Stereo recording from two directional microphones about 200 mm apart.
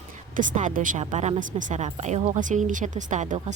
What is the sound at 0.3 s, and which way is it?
Speech, 40° right (ahead or behind).